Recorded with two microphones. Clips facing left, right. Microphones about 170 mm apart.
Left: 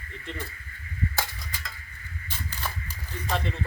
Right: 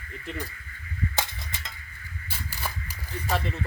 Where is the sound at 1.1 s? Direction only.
25° right (ahead or behind).